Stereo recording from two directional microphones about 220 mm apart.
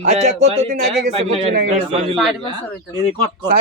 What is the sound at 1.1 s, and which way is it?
Speech, 30° right (ahead or behind).